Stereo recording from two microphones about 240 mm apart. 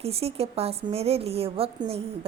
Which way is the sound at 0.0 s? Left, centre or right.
Right.